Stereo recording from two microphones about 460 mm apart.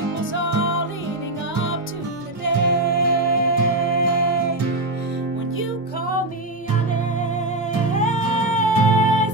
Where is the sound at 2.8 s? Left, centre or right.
Centre.